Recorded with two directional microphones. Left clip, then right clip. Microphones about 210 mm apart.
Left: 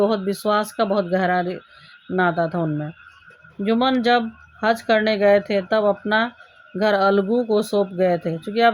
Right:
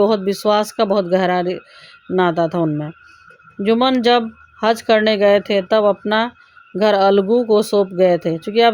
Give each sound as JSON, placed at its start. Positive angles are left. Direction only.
{"t": 0.0, "sound": "speech", "side_deg": -35}